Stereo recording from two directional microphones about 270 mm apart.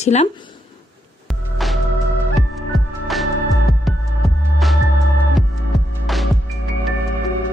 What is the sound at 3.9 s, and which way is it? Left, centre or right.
Music, centre.